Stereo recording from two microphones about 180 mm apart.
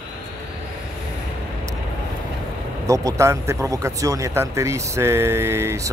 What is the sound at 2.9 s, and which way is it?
A man's voice, 15° right (ahead or behind).